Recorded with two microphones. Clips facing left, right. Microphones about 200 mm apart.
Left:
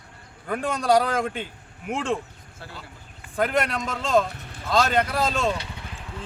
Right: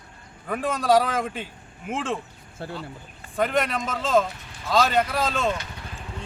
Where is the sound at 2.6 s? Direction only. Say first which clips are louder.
Right 8 dB; 55° right (ahead or behind).